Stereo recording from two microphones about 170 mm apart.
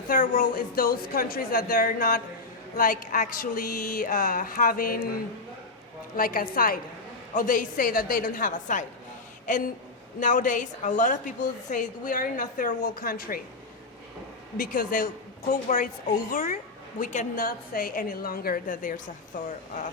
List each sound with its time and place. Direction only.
0.1 s speech: 50° left (ahead or behind)
6.1 s a woman's voice: 55° left (ahead or behind)
14.6 s a woman's voice: 50° left (ahead or behind)